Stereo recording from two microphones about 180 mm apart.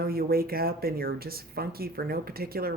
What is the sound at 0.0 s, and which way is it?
Speech, 55° right (ahead or behind).